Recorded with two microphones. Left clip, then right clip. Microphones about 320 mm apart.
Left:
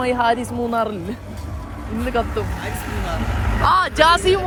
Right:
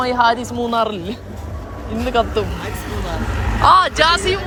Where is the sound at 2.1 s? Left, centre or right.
Centre.